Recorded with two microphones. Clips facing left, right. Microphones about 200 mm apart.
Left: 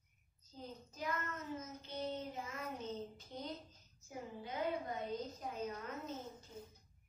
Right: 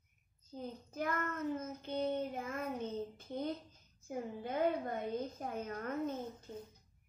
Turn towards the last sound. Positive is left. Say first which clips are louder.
# right 5 dB
turn(degrees=-55)  # may be behind; listen again after turning